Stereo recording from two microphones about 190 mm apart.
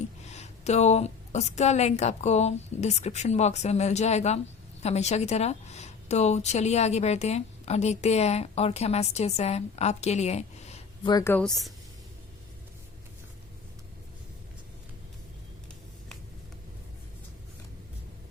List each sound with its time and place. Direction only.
0.3 s a woman's voice: 35° left (ahead or behind)
11.1 s a woman's voice: 15° left (ahead or behind)